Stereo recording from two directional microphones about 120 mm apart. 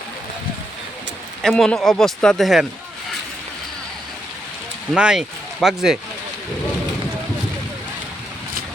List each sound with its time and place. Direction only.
1.4 s speech: 5° left (ahead or behind)
4.9 s speech: 5° right (ahead or behind)